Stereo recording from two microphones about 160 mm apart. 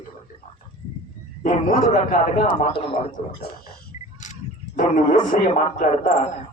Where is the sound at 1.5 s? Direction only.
50° left (ahead or behind).